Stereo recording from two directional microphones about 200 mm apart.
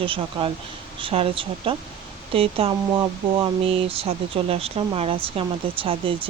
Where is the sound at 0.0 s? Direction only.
25° right (ahead or behind).